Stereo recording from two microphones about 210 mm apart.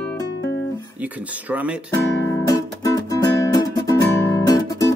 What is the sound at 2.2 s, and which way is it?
Music, 15° left (ahead or behind).